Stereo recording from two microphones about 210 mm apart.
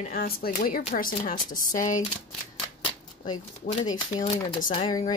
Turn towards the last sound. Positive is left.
turn(degrees=20)  # may be behind; listen again after turning